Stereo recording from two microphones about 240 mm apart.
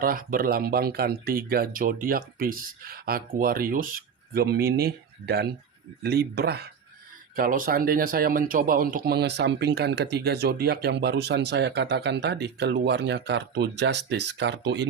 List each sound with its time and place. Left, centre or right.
0.0 s speech: right